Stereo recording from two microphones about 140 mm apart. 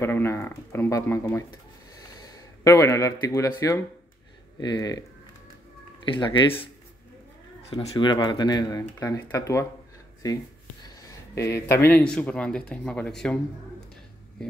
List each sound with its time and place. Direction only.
0.0 s speech: 20° left (ahead or behind); by 6.4 s 35° left (ahead or behind)
7.9 s speech: 30° left (ahead or behind); by 13.4 s 5° left (ahead or behind)